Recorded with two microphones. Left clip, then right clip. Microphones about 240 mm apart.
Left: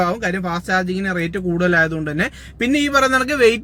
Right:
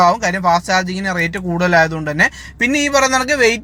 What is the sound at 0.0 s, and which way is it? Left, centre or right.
A man's voice, centre.